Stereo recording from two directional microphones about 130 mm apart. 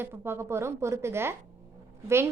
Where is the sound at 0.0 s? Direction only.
15° right (ahead or behind).